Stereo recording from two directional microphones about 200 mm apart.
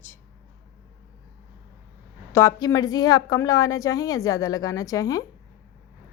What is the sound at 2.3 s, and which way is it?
A woman's voice, 15° left (ahead or behind).